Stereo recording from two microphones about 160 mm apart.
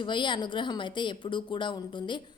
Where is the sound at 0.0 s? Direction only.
30° left (ahead or behind).